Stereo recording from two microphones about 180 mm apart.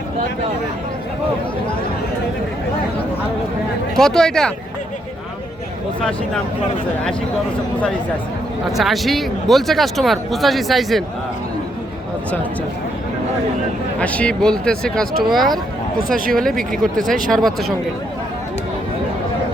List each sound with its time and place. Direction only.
3.9 s speech: 5° left (ahead or behind)
8.7 s speech: centre (ahead or behind)
14.0 s speech: 5° left (ahead or behind)
16.0 s speech: 55° right (ahead or behind)
16.4 s speech: centre (ahead or behind)